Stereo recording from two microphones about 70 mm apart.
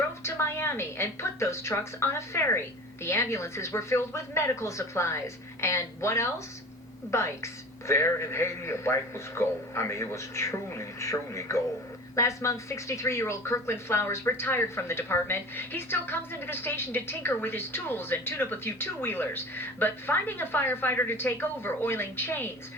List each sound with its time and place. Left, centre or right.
0.2 s a man's voice: left